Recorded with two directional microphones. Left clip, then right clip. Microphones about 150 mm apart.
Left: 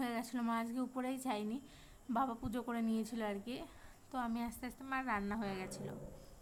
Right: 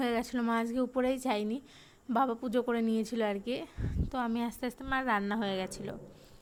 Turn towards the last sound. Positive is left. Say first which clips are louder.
# right 9 dB
turn(degrees=-40)  # may be behind; listen again after turning